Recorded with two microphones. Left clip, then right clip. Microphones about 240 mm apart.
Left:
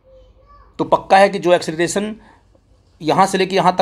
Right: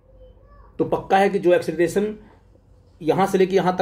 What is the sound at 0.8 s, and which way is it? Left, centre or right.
Speech, left.